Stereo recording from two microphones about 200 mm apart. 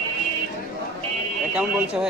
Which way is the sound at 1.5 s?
5° right (ahead or behind).